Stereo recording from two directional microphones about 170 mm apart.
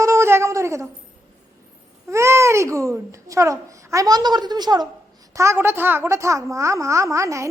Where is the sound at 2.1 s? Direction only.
15° right (ahead or behind).